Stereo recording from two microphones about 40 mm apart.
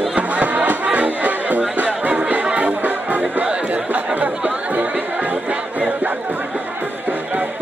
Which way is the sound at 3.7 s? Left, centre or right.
Right.